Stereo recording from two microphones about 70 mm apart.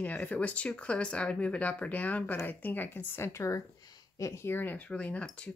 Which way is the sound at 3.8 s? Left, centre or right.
Left.